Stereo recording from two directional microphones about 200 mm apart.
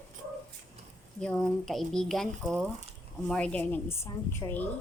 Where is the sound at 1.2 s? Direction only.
5° left (ahead or behind).